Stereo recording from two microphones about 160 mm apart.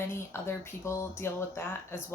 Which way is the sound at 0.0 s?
15° left (ahead or behind).